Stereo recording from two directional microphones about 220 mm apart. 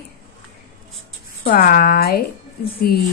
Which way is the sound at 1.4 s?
40° left (ahead or behind).